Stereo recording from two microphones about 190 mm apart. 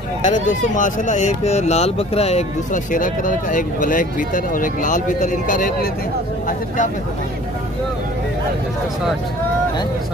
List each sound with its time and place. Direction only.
0.2 s speech: 40° left (ahead or behind)